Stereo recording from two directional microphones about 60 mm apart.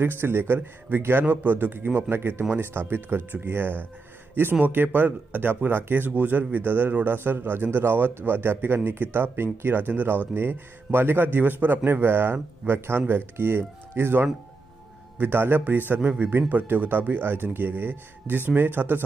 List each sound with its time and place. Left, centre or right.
0.0 s speech: right